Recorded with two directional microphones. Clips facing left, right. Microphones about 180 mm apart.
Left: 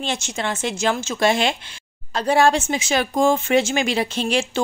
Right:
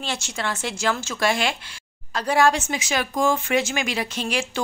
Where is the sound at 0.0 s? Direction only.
20° left (ahead or behind).